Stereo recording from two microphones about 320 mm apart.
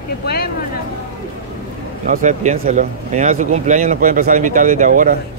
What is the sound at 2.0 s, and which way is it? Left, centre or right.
Speech, right.